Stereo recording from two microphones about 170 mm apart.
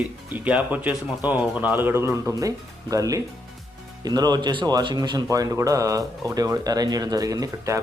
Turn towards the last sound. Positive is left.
turn(degrees=-20)  # may be behind; listen again after turning